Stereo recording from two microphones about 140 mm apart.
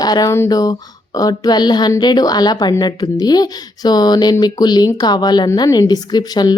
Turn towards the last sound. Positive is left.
turn(degrees=30)  # may be behind; listen again after turning